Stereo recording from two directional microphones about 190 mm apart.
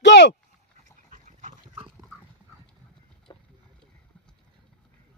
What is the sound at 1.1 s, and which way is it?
Dog, 40° right (ahead or behind).